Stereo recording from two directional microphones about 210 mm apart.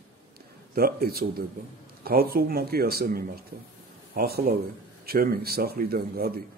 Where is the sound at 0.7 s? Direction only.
45° right (ahead or behind).